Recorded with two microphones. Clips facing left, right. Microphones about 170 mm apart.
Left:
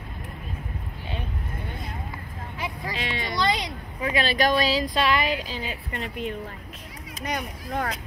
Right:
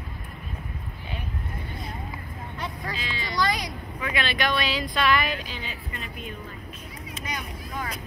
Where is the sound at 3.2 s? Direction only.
20° left (ahead or behind).